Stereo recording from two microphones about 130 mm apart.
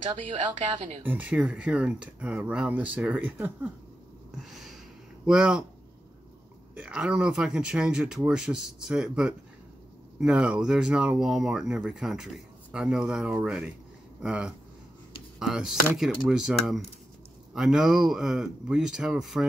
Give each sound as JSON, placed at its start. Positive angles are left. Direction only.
{"t": 1.0, "sound": "speech", "side_deg": -10}
{"t": 4.4, "sound": "a sound", "side_deg": 0}
{"t": 5.2, "sound": "speech", "side_deg": -5}
{"t": 6.7, "sound": "speech", "side_deg": -5}